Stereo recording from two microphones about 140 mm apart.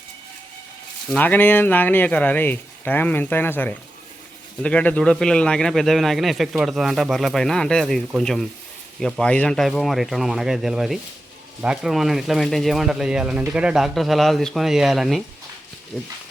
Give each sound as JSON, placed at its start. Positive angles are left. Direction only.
{"t": 1.1, "sound": "speech", "side_deg": 10}